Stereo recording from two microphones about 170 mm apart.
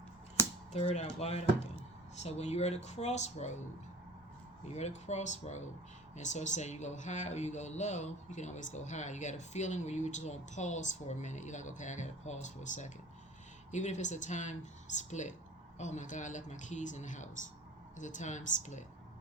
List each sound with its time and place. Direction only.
0.7 s speech: 40° left (ahead or behind)
4.7 s speech: 40° left (ahead or behind)